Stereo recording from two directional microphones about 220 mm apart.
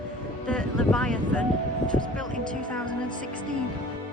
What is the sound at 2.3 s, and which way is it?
Speech, 35° right (ahead or behind).